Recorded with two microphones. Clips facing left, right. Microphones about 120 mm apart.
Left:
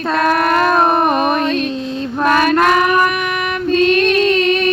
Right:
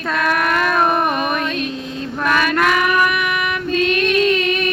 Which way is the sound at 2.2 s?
35° left (ahead or behind).